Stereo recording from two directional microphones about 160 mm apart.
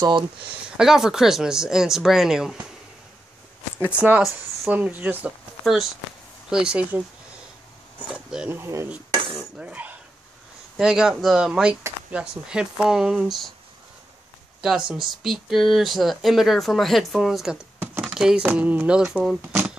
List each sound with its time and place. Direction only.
0.7 s speech: 5° right (ahead or behind)
4.2 s speech: 10° right (ahead or behind)
8.1 s speech: 5° right (ahead or behind)
14.6 s speech: 5° right (ahead or behind)